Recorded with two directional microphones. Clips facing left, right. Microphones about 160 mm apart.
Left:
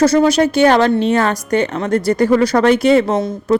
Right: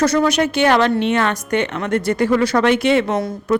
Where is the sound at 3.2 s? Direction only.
25° left (ahead or behind).